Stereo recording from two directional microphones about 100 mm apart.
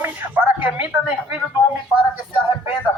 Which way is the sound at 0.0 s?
20° right (ahead or behind).